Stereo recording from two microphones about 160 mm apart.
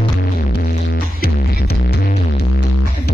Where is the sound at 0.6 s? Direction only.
75° left (ahead or behind).